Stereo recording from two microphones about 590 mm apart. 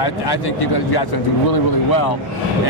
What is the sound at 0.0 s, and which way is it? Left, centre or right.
Speech, left.